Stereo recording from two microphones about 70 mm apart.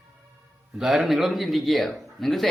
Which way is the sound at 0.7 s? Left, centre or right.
Centre.